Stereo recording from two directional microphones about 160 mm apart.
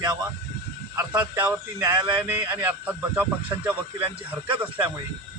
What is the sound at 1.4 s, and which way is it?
Speech, 15° right (ahead or behind).